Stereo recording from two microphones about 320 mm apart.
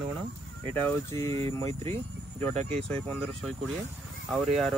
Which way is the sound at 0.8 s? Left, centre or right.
Centre.